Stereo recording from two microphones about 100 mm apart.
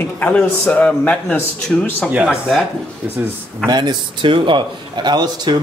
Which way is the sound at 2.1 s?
15° right (ahead or behind).